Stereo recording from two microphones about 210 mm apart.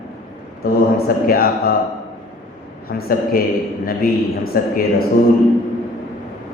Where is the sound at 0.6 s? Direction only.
45° left (ahead or behind).